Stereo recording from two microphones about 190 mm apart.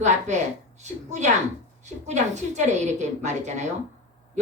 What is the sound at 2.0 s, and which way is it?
A woman's voice, 35° right (ahead or behind).